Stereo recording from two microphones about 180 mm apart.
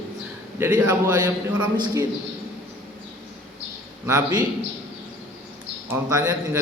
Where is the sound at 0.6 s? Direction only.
15° right (ahead or behind).